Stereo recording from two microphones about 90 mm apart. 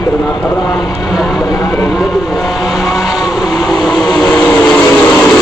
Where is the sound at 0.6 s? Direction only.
5° right (ahead or behind).